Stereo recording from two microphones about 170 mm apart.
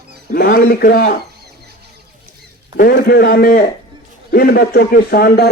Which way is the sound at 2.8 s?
65° left (ahead or behind).